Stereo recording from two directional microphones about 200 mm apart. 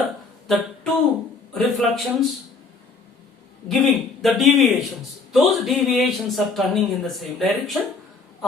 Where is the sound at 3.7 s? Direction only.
Centre (ahead or behind).